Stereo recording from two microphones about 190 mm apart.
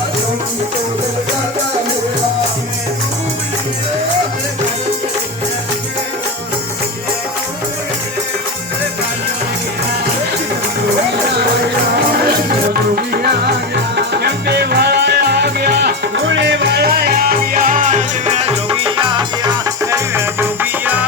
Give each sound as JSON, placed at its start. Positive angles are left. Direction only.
{"t": 13.0, "sound": "music", "side_deg": -55}
{"t": 16.2, "sound": "music", "side_deg": -75}